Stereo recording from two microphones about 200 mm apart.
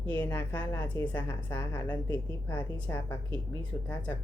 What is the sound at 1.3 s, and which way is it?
Speech, 20° left (ahead or behind).